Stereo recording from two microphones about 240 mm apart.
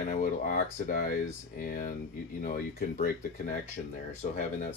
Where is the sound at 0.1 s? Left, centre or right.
Left.